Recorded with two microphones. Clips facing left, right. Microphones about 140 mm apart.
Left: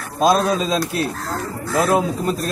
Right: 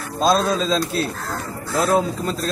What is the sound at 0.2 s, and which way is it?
Speech, 10° left (ahead or behind).